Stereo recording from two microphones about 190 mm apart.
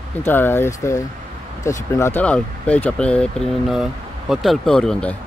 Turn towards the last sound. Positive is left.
turn(degrees=5)  # may be behind; listen again after turning